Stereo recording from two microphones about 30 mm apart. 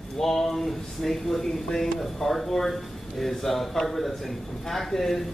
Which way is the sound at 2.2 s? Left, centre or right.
Centre.